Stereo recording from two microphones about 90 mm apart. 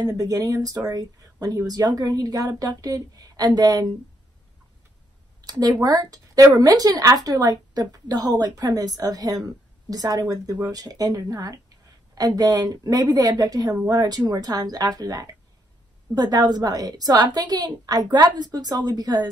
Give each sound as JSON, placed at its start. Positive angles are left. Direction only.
{"t": 0.0, "sound": "a woman's voice", "side_deg": -45}
{"t": 5.4, "sound": "a woman's voice", "side_deg": -45}